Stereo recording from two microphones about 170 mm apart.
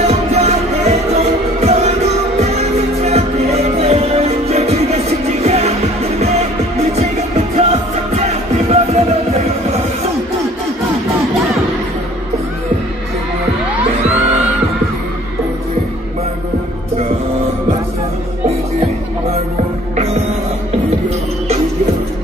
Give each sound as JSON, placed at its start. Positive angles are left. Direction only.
{"t": 0.0, "sound": "music", "side_deg": -40}
{"t": 11.3, "sound": "music", "side_deg": 0}